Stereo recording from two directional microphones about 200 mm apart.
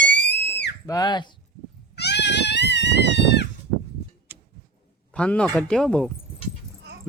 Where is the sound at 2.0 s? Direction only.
60° left (ahead or behind).